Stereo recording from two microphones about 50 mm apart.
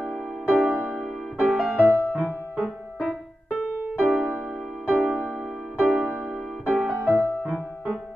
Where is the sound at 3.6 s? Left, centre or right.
Right.